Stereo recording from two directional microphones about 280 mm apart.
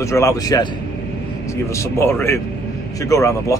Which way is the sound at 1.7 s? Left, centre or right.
Centre.